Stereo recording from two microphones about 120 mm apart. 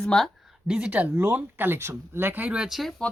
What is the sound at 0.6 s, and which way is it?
Speech, 10° right (ahead or behind).